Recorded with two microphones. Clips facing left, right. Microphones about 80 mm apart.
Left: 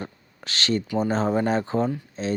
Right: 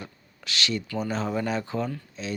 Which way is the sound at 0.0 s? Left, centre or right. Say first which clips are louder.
Left 5 dB; left.